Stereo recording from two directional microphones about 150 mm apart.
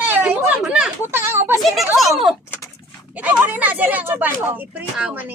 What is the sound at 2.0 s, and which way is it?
A woman's voice, centre (ahead or behind).